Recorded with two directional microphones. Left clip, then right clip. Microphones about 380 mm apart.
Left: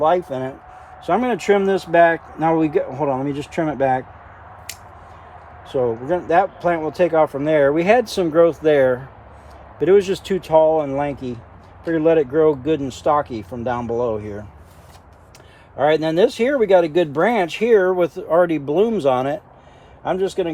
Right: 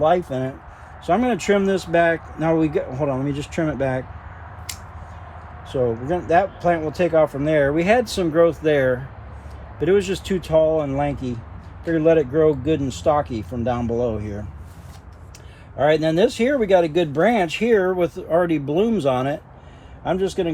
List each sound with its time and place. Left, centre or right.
0.0 s speech: centre
5.6 s speech: centre
15.8 s speech: left